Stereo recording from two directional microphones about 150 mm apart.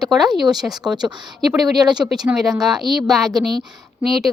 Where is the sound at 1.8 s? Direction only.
30° right (ahead or behind).